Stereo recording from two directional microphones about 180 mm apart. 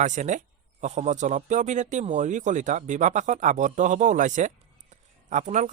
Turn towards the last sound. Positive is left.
turn(degrees=-40)  # may be behind; listen again after turning